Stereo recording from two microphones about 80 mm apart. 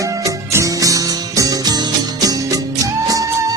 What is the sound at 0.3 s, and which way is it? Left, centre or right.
Music, right.